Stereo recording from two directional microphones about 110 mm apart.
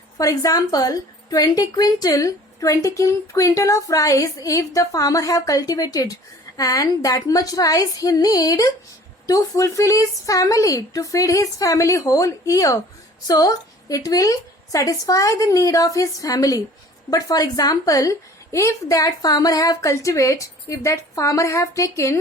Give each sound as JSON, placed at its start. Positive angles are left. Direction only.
{"t": 0.2, "sound": "a woman's voice", "side_deg": 30}